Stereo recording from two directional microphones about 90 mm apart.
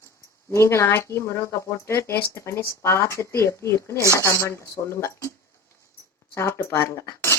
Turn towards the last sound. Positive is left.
turn(degrees=35)  # may be behind; listen again after turning